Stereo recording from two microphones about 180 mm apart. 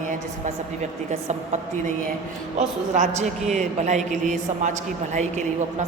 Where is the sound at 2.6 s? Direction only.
45° right (ahead or behind).